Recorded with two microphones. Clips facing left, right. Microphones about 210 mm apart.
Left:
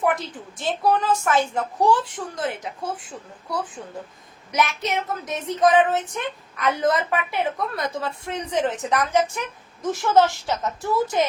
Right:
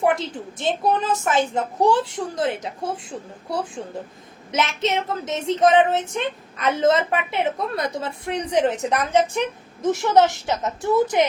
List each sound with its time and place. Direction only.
0.0 s a woman's voice: 25° right (ahead or behind)